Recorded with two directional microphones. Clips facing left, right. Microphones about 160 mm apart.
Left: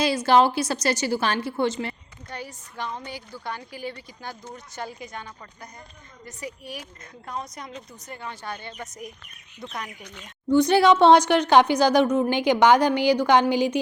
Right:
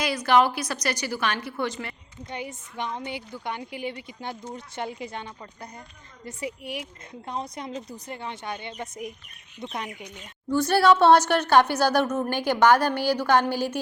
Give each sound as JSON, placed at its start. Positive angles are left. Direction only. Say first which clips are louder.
{"t": 0.0, "sound": "a woman's voice", "louder": "left 2 dB", "side_deg": 30}
{"t": 2.3, "sound": "a woman's voice", "louder": "right 2 dB", "side_deg": -20}
{"t": 6.7, "sound": "a woman's voice", "louder": "right 3 dB", "side_deg": -25}
{"t": 10.5, "sound": "speech", "louder": "left 2 dB", "side_deg": 15}